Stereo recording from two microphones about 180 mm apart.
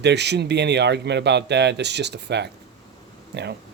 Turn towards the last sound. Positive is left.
turn(degrees=-70)  # may be behind; listen again after turning